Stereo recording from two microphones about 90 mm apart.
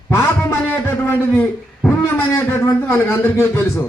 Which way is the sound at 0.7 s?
25° left (ahead or behind).